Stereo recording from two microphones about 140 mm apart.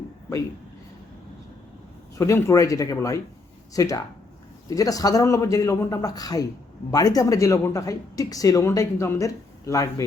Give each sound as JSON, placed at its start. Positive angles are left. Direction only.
{"t": 2.1, "sound": "speech", "side_deg": 20}